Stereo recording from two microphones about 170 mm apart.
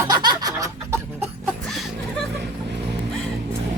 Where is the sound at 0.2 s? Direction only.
25° right (ahead or behind).